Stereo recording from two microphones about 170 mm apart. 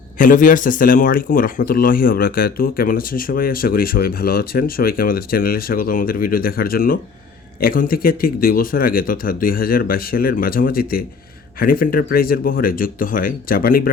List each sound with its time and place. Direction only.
0.2 s speech: 50° left (ahead or behind)